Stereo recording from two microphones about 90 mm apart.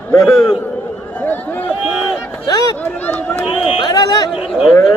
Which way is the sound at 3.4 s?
90° left.